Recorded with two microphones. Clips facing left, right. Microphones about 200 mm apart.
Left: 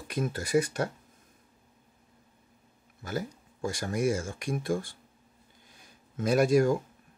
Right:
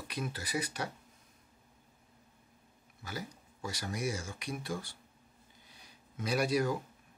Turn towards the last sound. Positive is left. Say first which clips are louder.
# left 8 dB
turn(degrees=50)  # may be behind; listen again after turning